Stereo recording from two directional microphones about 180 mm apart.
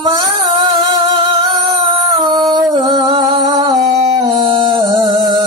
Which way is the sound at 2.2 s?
25° right (ahead or behind).